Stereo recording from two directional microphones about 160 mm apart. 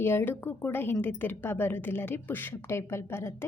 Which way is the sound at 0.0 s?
15° left (ahead or behind).